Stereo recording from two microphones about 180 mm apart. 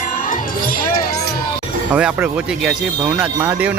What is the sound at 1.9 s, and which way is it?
Speech, 5° right (ahead or behind).